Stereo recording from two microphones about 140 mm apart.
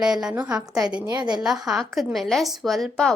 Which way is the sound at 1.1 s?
30° right (ahead or behind).